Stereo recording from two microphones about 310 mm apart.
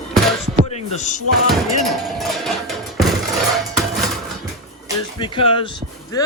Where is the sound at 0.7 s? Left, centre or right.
Left.